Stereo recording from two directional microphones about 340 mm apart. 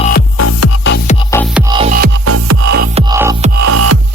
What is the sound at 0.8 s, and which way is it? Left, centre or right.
Music, left.